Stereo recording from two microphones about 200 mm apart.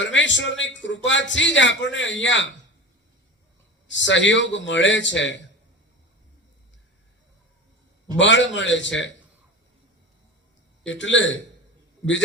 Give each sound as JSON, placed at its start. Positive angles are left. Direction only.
{"t": 0.0, "sound": "a man's voice", "side_deg": 65}
{"t": 3.8, "sound": "a man's voice", "side_deg": 65}
{"t": 8.2, "sound": "a man's voice", "side_deg": 65}
{"t": 10.8, "sound": "a man's voice", "side_deg": 65}